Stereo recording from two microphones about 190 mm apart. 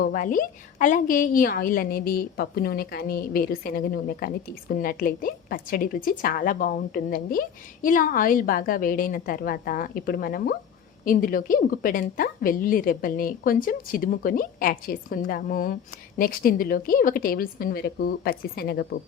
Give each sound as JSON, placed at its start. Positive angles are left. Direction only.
{"t": 0.0, "sound": "a woman's voice", "side_deg": 45}